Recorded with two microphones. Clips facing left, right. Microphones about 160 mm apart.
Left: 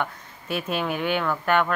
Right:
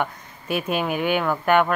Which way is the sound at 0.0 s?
15° right (ahead or behind).